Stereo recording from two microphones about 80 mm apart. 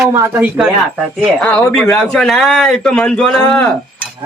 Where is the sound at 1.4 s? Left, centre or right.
Centre.